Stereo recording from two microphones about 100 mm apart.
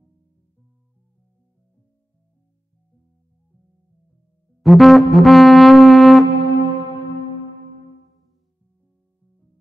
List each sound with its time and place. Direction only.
4.6 s music: centre (ahead or behind)